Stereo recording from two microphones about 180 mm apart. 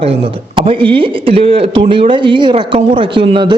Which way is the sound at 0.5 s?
30° right (ahead or behind).